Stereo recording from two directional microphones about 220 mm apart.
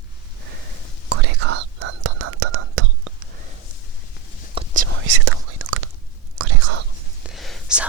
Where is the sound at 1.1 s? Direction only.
50° right (ahead or behind).